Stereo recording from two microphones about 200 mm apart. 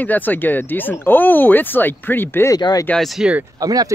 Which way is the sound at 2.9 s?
Centre (ahead or behind).